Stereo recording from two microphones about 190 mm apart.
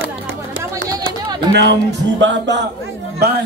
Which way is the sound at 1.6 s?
70° right (ahead or behind).